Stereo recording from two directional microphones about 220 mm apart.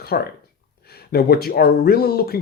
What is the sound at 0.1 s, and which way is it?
Speech, 45° left (ahead or behind).